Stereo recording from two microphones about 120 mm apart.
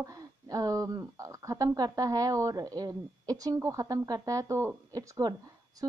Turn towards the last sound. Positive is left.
turn(degrees=-30)  # may be behind; listen again after turning